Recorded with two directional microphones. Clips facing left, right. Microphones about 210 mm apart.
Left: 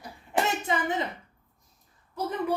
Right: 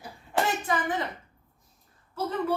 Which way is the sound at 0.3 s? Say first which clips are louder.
Even; 15° left (ahead or behind).